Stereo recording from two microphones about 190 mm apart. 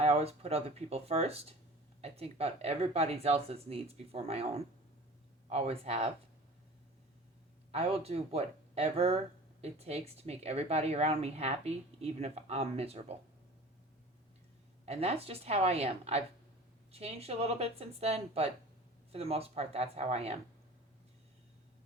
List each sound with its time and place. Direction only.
0.0 s speech: 35° right (ahead or behind)
7.7 s speech: 30° right (ahead or behind)
14.8 s speech: 35° right (ahead or behind)